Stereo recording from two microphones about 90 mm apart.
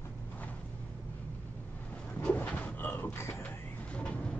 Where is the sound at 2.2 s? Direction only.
20° left (ahead or behind).